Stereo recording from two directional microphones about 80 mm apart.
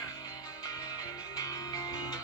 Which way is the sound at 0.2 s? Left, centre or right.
Left.